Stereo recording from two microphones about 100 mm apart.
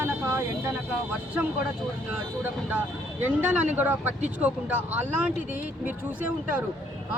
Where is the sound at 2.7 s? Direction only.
15° right (ahead or behind).